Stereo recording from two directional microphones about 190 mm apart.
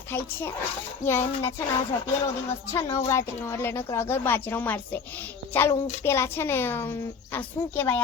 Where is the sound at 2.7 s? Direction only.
15° left (ahead or behind).